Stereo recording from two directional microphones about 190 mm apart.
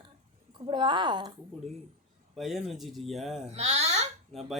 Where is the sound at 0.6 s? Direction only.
25° right (ahead or behind).